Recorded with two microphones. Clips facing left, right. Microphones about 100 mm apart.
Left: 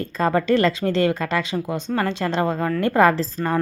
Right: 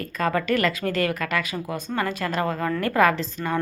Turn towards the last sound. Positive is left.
turn(degrees=35)  # may be behind; listen again after turning